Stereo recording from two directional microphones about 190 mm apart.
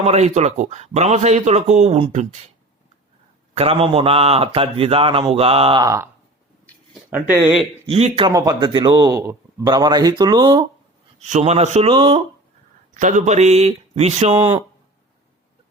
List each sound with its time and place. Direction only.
0.0 s speech: 35° right (ahead or behind)
3.5 s speech: 30° right (ahead or behind)
5.8 s speech: 15° right (ahead or behind)
7.1 s speech: 10° right (ahead or behind)
7.9 s a man's voice: 30° right (ahead or behind)
8.3 s a man's voice: 20° right (ahead or behind)
11.2 s speech: 35° right (ahead or behind)
12.9 s speech: 40° right (ahead or behind)